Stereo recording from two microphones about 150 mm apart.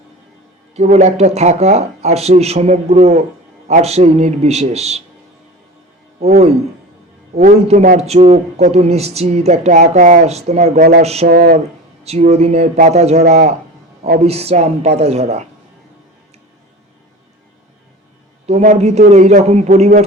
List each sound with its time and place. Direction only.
0.8 s speech: 50° right (ahead or behind)
6.1 s speech: 50° right (ahead or behind)
11.3 s speech: 80° right
12.0 s speech: 45° right (ahead or behind)
18.4 s speech: 50° right (ahead or behind)